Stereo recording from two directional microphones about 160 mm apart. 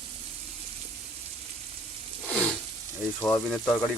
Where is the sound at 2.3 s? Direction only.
10° left (ahead or behind).